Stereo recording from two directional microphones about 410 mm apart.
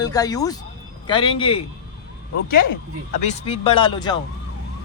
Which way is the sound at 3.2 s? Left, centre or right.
Centre.